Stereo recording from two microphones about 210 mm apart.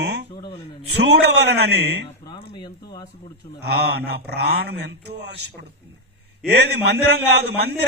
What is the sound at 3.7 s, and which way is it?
Speech, 50° right (ahead or behind).